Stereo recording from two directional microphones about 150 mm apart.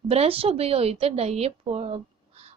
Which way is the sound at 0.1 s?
40° right (ahead or behind).